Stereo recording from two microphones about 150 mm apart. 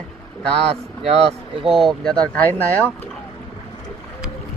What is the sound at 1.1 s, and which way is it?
Speech, 40° right (ahead or behind).